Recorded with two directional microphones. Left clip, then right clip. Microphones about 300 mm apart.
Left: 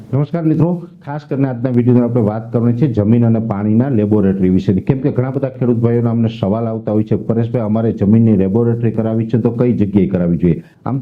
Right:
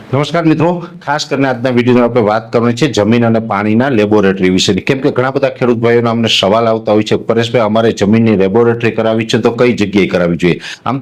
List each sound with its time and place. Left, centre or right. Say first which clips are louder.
0.2 s a man's voice: right 6 dB; centre
2.0 s a man's voice: right 6 dB; centre